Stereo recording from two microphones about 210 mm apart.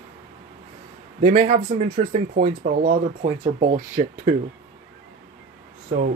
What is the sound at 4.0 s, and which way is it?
Speech, 30° right (ahead or behind).